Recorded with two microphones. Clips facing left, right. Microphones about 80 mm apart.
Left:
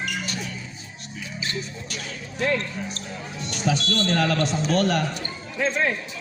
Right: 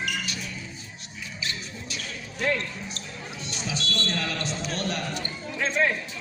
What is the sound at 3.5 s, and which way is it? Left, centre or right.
Speech, left.